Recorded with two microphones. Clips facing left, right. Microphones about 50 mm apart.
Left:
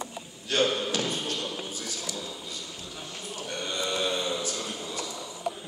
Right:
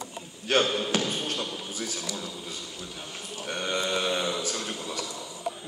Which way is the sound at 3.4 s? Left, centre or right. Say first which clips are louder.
Right 3 dB; right.